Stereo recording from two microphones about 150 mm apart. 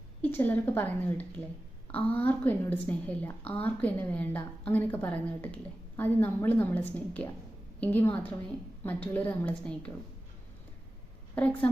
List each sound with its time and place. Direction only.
0.2 s a woman's voice: 10° left (ahead or behind)
11.3 s a woman's voice: 10° left (ahead or behind)